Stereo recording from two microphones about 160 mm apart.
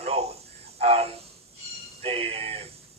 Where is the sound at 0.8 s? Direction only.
40° right (ahead or behind).